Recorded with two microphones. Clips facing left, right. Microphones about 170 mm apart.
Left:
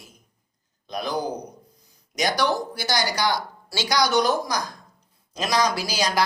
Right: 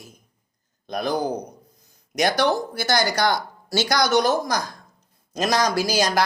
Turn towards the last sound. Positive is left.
turn(degrees=-50)  # may be behind; listen again after turning